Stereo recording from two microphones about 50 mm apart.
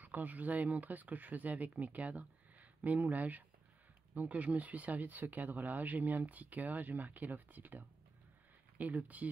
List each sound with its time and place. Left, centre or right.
0.0 s speech: right